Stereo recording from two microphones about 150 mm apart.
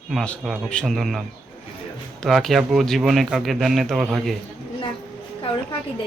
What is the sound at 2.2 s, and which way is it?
Speech, centre (ahead or behind).